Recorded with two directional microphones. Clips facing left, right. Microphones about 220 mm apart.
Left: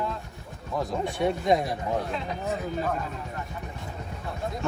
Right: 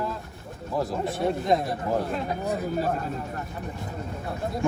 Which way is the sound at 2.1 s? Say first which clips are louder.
Right 3 dB; 50° right (ahead or behind).